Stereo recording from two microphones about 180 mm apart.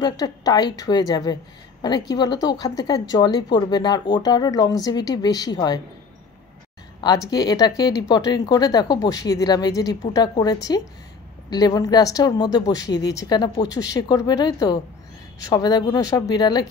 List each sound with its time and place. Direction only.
0.0 s a woman's voice: 20° left (ahead or behind)
7.0 s a woman's voice: 20° left (ahead or behind)